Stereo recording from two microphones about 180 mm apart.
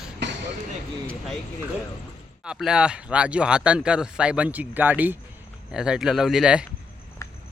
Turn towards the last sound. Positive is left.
turn(degrees=-5)  # may be behind; listen again after turning